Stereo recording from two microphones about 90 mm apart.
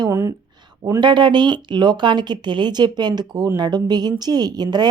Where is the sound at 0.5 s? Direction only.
55° right (ahead or behind).